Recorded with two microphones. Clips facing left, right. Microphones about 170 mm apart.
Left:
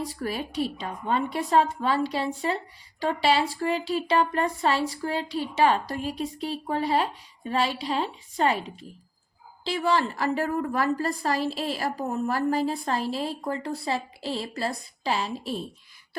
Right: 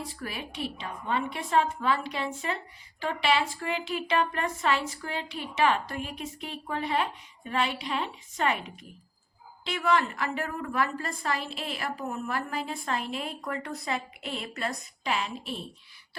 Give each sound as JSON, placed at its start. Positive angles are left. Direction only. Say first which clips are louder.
{"t": 0.0, "sound": "a woman's voice", "louder": "left 7 dB", "side_deg": 40}